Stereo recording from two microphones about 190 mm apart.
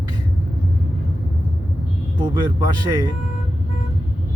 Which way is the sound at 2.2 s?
25° right (ahead or behind).